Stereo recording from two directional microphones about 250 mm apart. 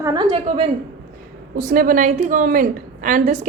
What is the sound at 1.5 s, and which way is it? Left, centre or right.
A woman's voice, right.